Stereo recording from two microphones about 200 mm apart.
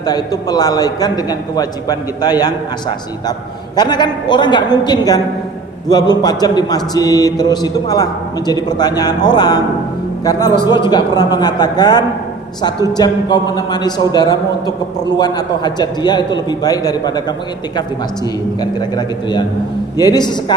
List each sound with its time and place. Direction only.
0.0 s a man's voice: 20° left (ahead or behind)
3.8 s a man's voice: 20° left (ahead or behind)
18.6 s a man's voice: 20° left (ahead or behind)